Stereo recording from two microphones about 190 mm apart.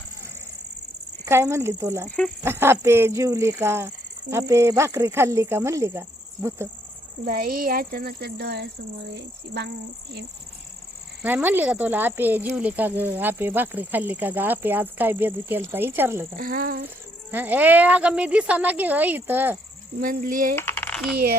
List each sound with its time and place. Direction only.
1.2 s speech: 15° right (ahead or behind)
2.0 s speech: 5° left (ahead or behind)
2.4 s speech: 10° right (ahead or behind)
7.3 s speech: 50° right (ahead or behind)
11.2 s speech: 10° right (ahead or behind)
16.4 s speech: 50° right (ahead or behind)
17.3 s speech: 10° right (ahead or behind)
20.0 s speech: 45° right (ahead or behind)
20.6 s coin: 10° left (ahead or behind)